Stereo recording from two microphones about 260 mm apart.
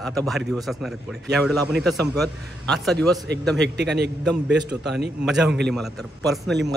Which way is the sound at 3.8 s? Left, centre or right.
Right.